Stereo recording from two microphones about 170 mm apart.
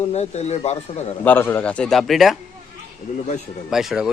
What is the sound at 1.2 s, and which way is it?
A man's voice, 10° left (ahead or behind).